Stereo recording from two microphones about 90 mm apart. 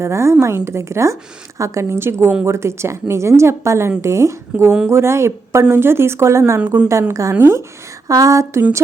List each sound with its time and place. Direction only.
0.0 s a woman's voice: 30° right (ahead or behind)
8.0 s a woman's voice: 40° right (ahead or behind)